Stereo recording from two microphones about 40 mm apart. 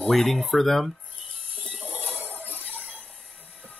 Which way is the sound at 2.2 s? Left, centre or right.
Left.